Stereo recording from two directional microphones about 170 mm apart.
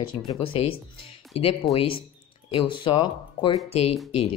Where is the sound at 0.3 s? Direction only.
30° left (ahead or behind).